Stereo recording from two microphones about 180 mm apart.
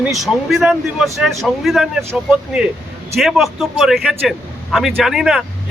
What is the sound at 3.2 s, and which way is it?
Speech, centre (ahead or behind).